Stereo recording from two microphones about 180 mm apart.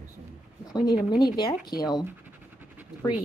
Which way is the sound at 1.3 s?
25° left (ahead or behind).